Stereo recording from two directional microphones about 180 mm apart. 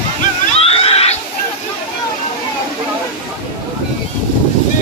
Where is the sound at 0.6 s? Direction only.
35° left (ahead or behind).